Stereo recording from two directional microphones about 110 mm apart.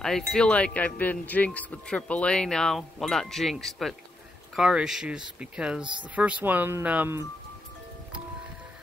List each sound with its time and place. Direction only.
0.0 s speech: 5° left (ahead or behind); by 7.2 s 15° right (ahead or behind)